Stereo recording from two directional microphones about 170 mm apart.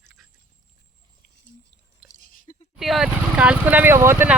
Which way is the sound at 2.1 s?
50° left (ahead or behind).